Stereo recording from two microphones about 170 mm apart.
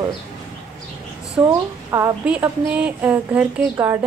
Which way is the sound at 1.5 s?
20° right (ahead or behind).